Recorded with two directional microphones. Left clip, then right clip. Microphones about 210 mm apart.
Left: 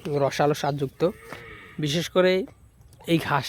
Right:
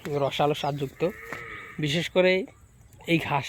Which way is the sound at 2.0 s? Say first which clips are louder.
Left 1 dB; 20° left (ahead or behind).